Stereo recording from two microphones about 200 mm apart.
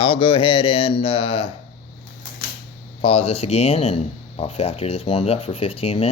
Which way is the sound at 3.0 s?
30° left (ahead or behind).